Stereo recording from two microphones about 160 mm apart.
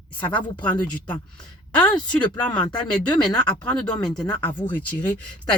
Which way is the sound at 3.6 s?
10° left (ahead or behind).